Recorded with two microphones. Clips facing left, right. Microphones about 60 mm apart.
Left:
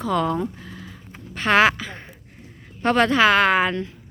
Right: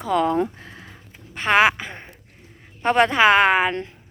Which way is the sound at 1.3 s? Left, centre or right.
Centre.